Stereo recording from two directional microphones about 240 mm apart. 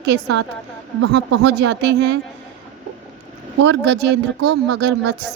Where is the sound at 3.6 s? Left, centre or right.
Right.